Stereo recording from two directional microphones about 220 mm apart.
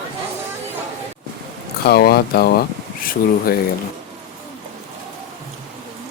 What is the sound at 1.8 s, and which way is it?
Speech, 45° left (ahead or behind).